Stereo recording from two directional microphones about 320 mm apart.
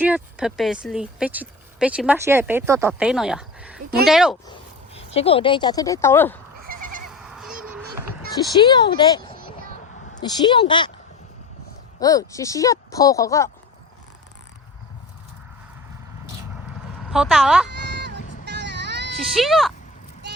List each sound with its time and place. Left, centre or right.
0.0 s speech: centre
4.9 s speech: centre
7.1 s honk: centre
8.5 s speech: centre
11.9 s speech: centre
17.1 s speech: centre
17.7 s a sound: right
18.4 s vehicle: right
19.4 s speech: centre